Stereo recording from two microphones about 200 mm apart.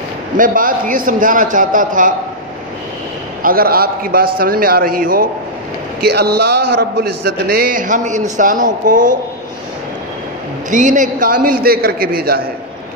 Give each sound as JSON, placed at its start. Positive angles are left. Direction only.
{"t": 0.4, "sound": "a man's voice", "side_deg": -45}
{"t": 3.4, "sound": "a man's voice", "side_deg": -50}
{"t": 10.7, "sound": "a man's voice", "side_deg": -40}